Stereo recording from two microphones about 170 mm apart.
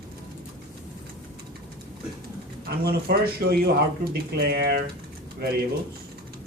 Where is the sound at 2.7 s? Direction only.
65° right (ahead or behind).